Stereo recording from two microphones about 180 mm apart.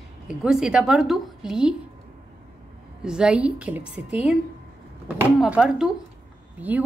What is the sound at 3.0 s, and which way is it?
A woman's voice, 5° right (ahead or behind).